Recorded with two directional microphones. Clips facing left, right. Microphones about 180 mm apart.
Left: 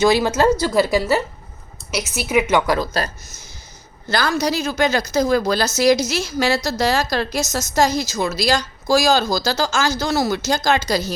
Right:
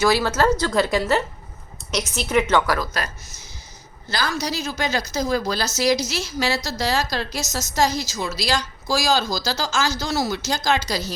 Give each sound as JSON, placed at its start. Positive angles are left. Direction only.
{"t": 0.0, "sound": "a woman's voice", "side_deg": 20}
{"t": 2.7, "sound": "speech", "side_deg": 30}
{"t": 4.1, "sound": "a woman's voice", "side_deg": 55}